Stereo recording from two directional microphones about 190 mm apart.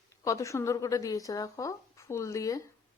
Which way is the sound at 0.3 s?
15° left (ahead or behind).